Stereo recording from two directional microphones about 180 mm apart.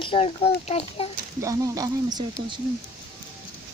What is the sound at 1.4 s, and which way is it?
Speech, 20° right (ahead or behind).